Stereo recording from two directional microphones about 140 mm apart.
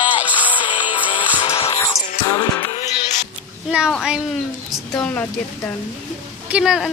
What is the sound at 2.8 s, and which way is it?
Music, 55° left (ahead or behind).